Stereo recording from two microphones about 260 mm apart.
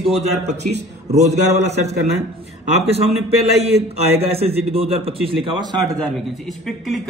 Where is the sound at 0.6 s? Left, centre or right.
Right.